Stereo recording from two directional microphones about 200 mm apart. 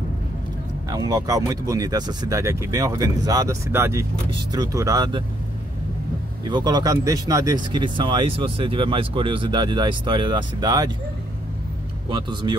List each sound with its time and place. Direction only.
0.8 s speech: 20° right (ahead or behind)
6.4 s speech: 20° right (ahead or behind)
12.1 s speech: 25° right (ahead or behind)